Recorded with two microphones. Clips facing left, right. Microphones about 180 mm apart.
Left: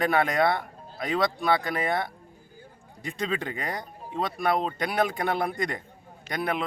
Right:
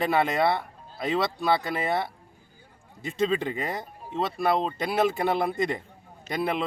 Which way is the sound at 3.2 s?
5° right (ahead or behind).